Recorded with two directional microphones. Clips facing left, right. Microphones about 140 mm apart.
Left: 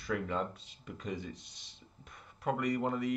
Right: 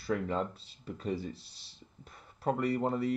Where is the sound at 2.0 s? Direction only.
35° right (ahead or behind).